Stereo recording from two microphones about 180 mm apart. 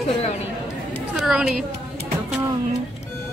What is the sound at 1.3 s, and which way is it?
Speech, 5° right (ahead or behind).